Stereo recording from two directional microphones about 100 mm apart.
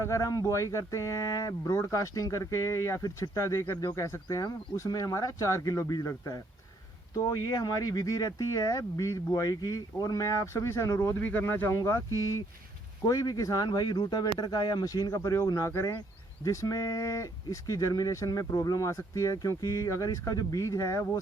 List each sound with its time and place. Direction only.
0.0 s speech: 30° left (ahead or behind)